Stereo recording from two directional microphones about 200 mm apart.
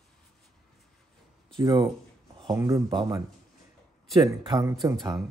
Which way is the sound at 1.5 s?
20° right (ahead or behind).